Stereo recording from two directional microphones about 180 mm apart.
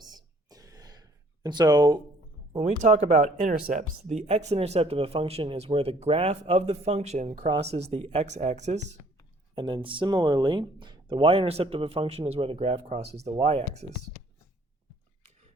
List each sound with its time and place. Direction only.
0.0 s gasp: 20° right (ahead or behind)
2.5 s speech: 40° right (ahead or behind)
9.6 s speech: 25° right (ahead or behind)